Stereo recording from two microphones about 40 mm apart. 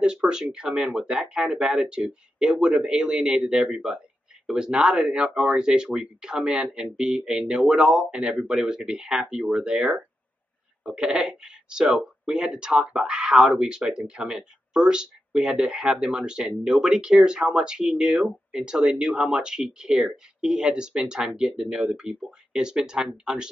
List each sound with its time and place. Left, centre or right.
0.0 s speech: right